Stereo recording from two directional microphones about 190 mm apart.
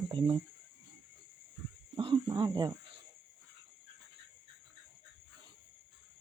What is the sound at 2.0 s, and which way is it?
Speech, 25° right (ahead or behind).